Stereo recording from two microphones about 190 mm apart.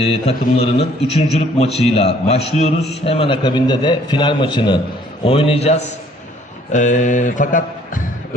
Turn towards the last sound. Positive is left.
turn(degrees=45)  # may be behind; listen again after turning